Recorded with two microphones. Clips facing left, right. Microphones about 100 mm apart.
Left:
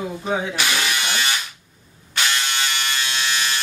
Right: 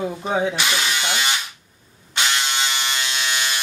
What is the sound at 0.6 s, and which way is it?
Electric shaver, 20° right (ahead or behind).